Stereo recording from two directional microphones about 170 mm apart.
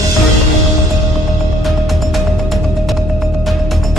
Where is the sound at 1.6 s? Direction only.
Centre (ahead or behind).